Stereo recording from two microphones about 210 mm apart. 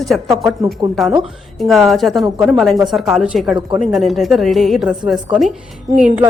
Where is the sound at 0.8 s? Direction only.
20° right (ahead or behind).